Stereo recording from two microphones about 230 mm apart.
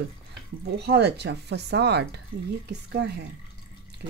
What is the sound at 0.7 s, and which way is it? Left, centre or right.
Speech, right.